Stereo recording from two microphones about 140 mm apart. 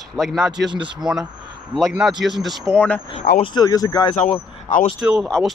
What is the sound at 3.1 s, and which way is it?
Speech, 45° left (ahead or behind).